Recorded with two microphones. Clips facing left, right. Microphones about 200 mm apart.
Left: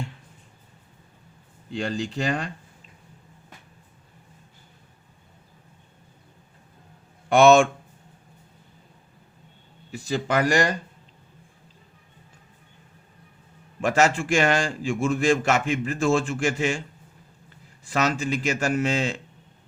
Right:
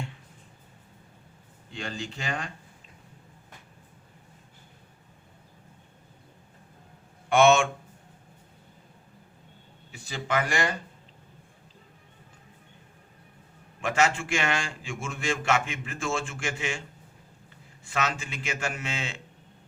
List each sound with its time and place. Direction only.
1.7 s a man's voice: 35° left (ahead or behind)
7.3 s speech: 35° left (ahead or behind)
10.1 s a man's voice: 40° left (ahead or behind)
13.8 s a man's voice: 40° left (ahead or behind)
17.8 s a man's voice: 40° left (ahead or behind)